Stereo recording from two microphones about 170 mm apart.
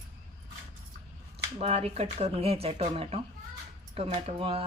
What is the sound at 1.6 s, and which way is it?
Speech, 35° right (ahead or behind).